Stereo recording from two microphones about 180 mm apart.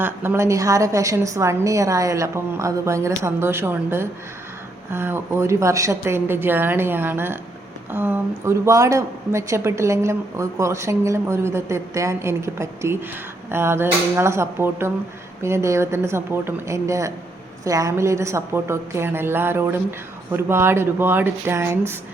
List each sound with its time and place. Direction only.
0.0 s a woman's voice: 10° right (ahead or behind)